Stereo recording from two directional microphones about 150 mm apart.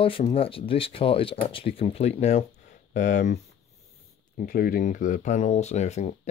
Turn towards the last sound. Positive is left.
turn(degrees=50)  # may be behind; listen again after turning